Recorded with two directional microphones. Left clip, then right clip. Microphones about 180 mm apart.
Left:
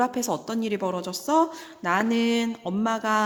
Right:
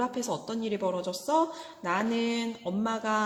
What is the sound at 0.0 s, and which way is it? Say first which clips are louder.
Speech: left 6 dB; 35° left (ahead or behind).